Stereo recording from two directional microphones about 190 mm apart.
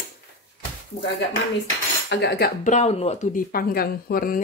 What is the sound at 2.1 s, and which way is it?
Speech, 60° left (ahead or behind).